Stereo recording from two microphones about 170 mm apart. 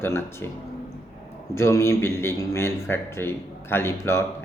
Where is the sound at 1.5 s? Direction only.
15° left (ahead or behind).